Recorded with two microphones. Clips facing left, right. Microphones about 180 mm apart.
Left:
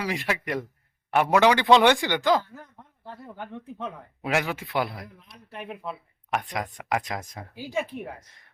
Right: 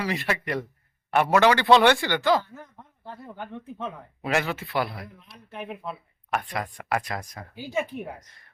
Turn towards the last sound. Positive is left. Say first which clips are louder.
# right 1 dB
turn(degrees=0)  # may be behind; listen again after turning